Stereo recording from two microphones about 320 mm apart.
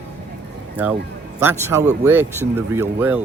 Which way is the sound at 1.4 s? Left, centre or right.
Centre.